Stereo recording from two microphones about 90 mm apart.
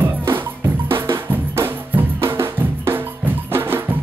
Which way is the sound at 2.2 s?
30° right (ahead or behind).